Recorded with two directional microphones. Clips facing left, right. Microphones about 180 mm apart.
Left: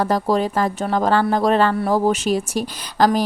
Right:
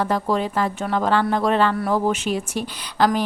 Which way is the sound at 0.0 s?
40° left (ahead or behind).